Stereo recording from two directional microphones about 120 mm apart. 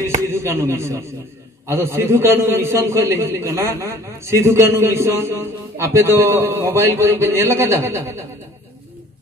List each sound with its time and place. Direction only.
0.3 s a man's voice: 20° right (ahead or behind)